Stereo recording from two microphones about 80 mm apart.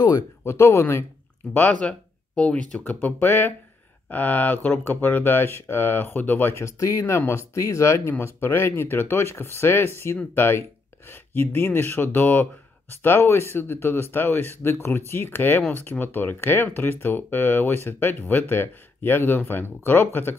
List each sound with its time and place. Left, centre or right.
0.4 s speech: left
1.5 s speech: centre